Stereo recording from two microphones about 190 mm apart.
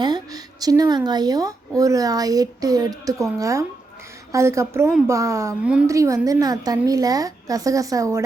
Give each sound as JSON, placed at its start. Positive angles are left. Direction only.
{"t": 0.0, "sound": "a woman's voice", "side_deg": -20}